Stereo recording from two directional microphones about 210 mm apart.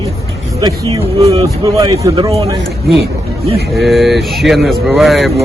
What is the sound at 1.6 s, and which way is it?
Speech, 15° right (ahead or behind).